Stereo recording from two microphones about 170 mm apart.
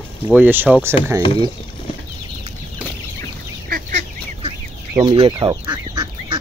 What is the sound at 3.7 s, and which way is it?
Duck, 55° right (ahead or behind).